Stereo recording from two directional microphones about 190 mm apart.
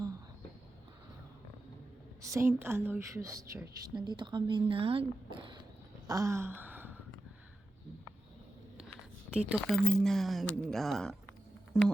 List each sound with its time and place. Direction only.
2.2 s a woman's voice: 15° right (ahead or behind)
6.1 s gasp: 15° right (ahead or behind)
9.3 s speech: 5° right (ahead or behind)